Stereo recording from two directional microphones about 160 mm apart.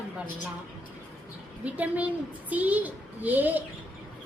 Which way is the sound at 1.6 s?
10° right (ahead or behind).